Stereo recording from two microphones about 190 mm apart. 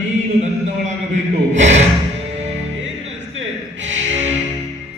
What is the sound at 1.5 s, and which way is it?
Music, 40° right (ahead or behind).